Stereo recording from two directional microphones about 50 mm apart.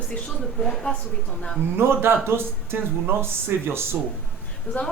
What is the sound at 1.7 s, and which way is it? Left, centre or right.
Speech, right.